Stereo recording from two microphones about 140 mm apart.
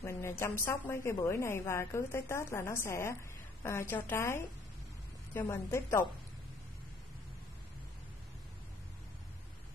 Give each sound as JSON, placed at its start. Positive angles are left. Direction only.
{"t": 0.0, "sound": "a woman's voice", "side_deg": 20}